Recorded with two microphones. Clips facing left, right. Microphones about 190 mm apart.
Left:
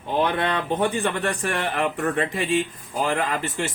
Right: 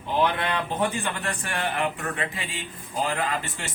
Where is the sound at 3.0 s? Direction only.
40° left (ahead or behind).